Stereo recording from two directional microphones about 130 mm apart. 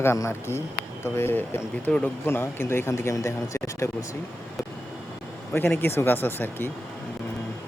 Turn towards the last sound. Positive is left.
turn(degrees=15)  # may be behind; listen again after turning